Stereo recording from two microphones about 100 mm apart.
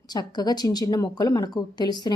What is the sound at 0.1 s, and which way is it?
A woman's voice, 45° left (ahead or behind).